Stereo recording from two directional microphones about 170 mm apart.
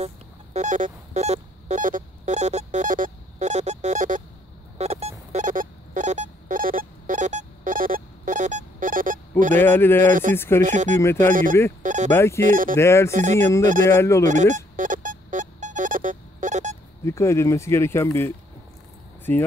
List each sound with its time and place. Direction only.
0.0 s music: 40° right (ahead or behind)
4.7 s a sound: 40° right (ahead or behind)
9.6 s speech: 10° left (ahead or behind)
10.6 s speech: 45° right (ahead or behind)
11.0 s speech: 15° left (ahead or behind)
11.8 s speech: 45° right (ahead or behind)
12.1 s speech: 15° left (ahead or behind)
12.4 s speech: 50° right (ahead or behind)
12.7 s speech: 15° left (ahead or behind)
13.1 s speech: 45° right (ahead or behind)
13.4 s speech: 15° left (ahead or behind)
14.2 s music: 45° right (ahead or behind)
17.0 s speech: 15° left (ahead or behind)